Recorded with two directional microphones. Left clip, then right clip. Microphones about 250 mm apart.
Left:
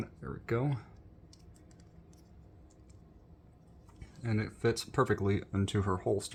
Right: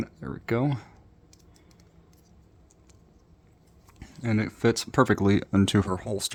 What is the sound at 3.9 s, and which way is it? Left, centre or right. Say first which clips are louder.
Speech: right 8 dB; right.